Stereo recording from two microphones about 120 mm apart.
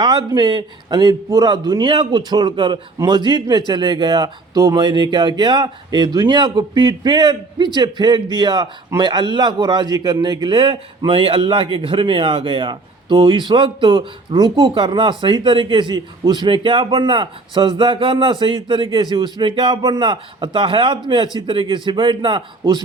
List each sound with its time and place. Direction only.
0.0 s speech: 35° right (ahead or behind)